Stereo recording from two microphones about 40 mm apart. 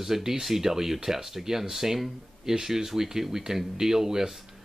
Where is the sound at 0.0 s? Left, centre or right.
Centre.